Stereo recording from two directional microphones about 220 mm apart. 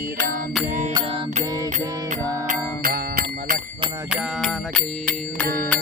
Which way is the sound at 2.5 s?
40° right (ahead or behind).